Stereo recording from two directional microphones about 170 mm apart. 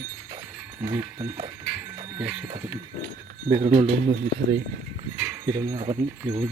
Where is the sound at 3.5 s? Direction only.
35° right (ahead or behind).